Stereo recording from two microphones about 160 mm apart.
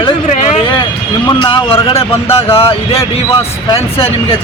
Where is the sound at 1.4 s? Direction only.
35° left (ahead or behind).